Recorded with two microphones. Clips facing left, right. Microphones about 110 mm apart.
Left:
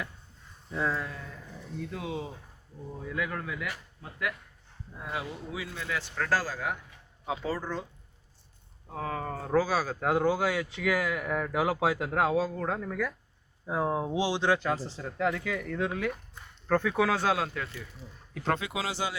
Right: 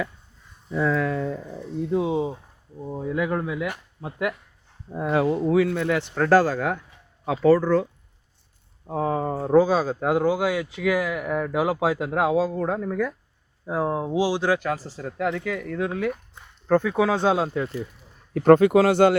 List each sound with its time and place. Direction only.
0.9 s speech: 70° right (ahead or behind)
1.8 s speech: 25° right (ahead or behind)
4.9 s speech: 60° right (ahead or behind)
6.4 s speech: 65° right (ahead or behind)
7.3 s speech: 90° right
8.9 s speech: 25° right (ahead or behind); by 15.9 s centre (ahead or behind)
15.9 s speech: 15° right (ahead or behind)
18.3 s speech: 50° right (ahead or behind)